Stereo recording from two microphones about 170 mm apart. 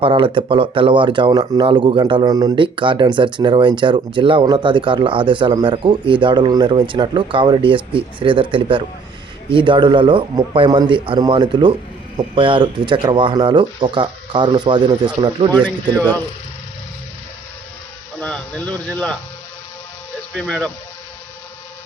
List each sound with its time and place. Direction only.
0.0 s speech: 30° right (ahead or behind)
15.5 s speech: 10° left (ahead or behind)
18.2 s speech: 5° left (ahead or behind)
20.3 s speech: 5° left (ahead or behind)